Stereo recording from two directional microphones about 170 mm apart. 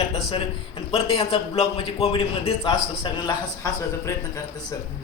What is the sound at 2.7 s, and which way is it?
A man's voice, 25° left (ahead or behind).